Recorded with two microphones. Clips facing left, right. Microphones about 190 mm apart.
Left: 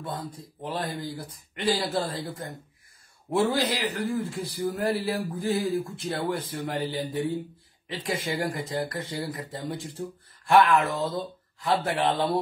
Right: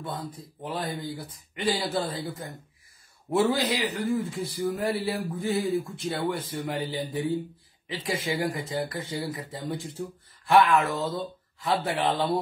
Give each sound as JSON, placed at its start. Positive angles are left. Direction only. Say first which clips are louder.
{"t": 0.0, "sound": "a man's voice", "louder": "even", "side_deg": 0}